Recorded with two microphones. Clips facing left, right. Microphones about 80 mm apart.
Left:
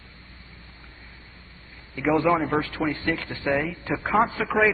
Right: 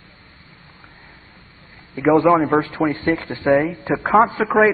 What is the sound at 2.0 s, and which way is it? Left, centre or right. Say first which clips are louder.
A man's voice: right 7 dB; right.